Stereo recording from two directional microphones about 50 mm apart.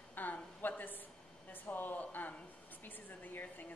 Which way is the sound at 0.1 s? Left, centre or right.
Left.